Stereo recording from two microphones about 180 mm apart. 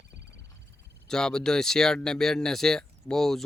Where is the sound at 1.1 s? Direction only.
5° left (ahead or behind).